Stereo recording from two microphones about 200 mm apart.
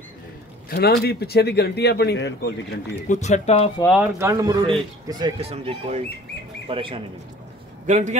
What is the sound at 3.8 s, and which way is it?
A man's voice, 10° right (ahead or behind).